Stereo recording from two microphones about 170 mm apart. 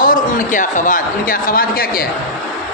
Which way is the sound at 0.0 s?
55° left (ahead or behind).